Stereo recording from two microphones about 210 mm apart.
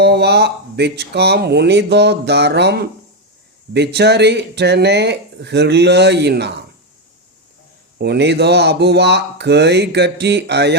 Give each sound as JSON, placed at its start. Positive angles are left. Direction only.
{"t": 0.0, "sound": "speech", "side_deg": -50}
{"t": 7.9, "sound": "speech", "side_deg": -50}